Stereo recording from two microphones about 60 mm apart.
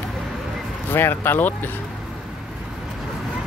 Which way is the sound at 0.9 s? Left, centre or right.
Left.